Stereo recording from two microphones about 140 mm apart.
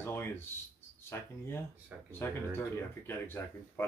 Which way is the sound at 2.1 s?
15° left (ahead or behind).